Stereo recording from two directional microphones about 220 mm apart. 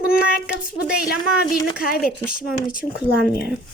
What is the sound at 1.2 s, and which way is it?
Speech, 20° left (ahead or behind).